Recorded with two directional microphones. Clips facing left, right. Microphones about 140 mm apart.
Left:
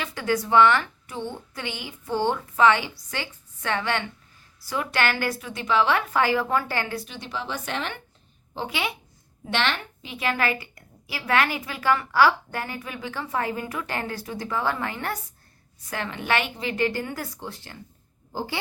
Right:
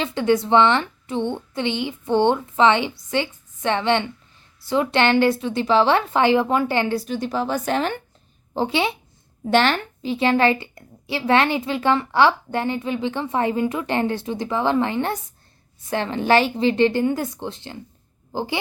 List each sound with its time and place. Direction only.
0.0 s a woman's voice: 25° right (ahead or behind)
6.9 s a woman's voice: 40° right (ahead or behind)
8.5 s a woman's voice: 30° right (ahead or behind)
9.5 s a woman's voice: 40° right (ahead or behind); by 18.6 s 20° right (ahead or behind)